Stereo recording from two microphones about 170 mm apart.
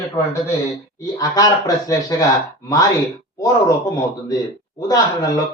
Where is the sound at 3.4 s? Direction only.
20° left (ahead or behind).